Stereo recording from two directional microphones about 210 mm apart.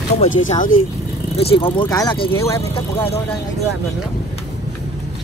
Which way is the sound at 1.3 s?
25° left (ahead or behind).